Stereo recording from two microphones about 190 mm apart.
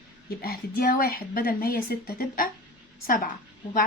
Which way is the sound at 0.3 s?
55° left (ahead or behind).